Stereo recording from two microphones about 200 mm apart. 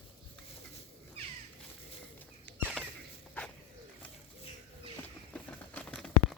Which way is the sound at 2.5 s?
10° left (ahead or behind).